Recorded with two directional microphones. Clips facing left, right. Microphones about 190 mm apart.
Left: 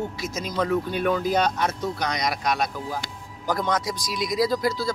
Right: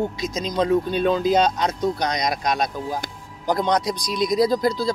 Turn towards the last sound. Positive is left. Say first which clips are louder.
# right 4 dB
turn(degrees=-20)  # may be behind; listen again after turning